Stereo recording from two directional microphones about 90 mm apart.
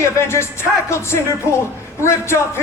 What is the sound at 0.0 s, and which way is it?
Speech, 30° left (ahead or behind).